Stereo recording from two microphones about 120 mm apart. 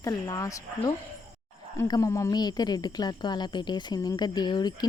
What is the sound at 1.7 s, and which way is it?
Speech, 30° left (ahead or behind).